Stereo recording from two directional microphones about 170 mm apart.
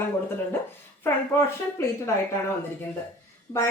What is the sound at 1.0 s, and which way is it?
Speech, 15° left (ahead or behind).